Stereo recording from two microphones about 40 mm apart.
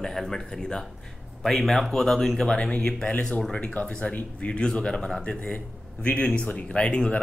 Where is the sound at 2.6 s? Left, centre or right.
Left.